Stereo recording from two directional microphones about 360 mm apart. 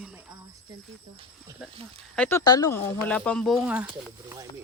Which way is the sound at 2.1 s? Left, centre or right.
Centre.